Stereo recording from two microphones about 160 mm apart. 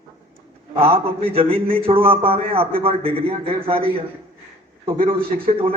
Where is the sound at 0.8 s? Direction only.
35° right (ahead or behind).